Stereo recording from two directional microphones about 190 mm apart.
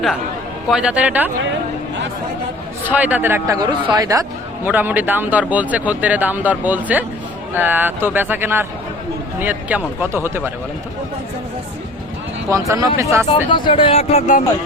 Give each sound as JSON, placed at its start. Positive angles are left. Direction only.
{"t": 0.7, "sound": "speech", "side_deg": -5}
{"t": 2.8, "sound": "speech", "side_deg": -10}
{"t": 12.5, "sound": "speech", "side_deg": -15}
{"t": 13.5, "sound": "speech", "side_deg": 25}